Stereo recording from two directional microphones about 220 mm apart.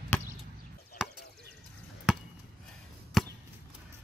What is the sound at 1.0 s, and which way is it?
Chop, centre (ahead or behind).